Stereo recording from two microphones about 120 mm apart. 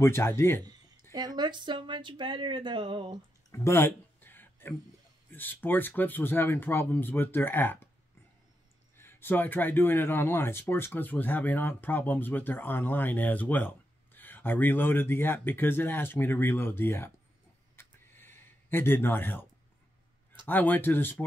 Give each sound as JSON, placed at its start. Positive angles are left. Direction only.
{"t": 0.0, "sound": "speech", "side_deg": 20}
{"t": 1.1, "sound": "speech", "side_deg": -35}
{"t": 3.5, "sound": "a sound", "side_deg": 25}
{"t": 5.3, "sound": "speech", "side_deg": 15}
{"t": 8.9, "sound": "speech", "side_deg": 20}
{"t": 17.7, "sound": "a sound", "side_deg": 20}
{"t": 20.4, "sound": "speech", "side_deg": 15}